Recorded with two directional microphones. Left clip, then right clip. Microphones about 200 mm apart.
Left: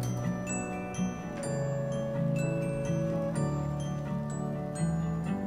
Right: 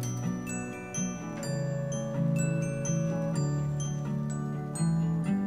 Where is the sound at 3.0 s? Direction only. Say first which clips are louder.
Left 1 dB; centre (ahead or behind).